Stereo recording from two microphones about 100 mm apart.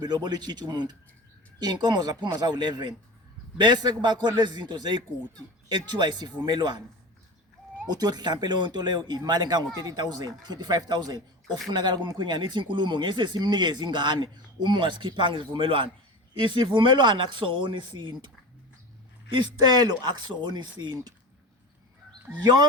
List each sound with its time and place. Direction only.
0.0 s speech: 45° right (ahead or behind)
7.9 s speech: 45° right (ahead or behind)
19.5 s speech: 45° right (ahead or behind)
22.3 s speech: 15° right (ahead or behind)